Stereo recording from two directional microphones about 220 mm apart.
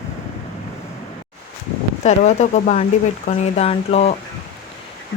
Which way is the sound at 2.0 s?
30° left (ahead or behind).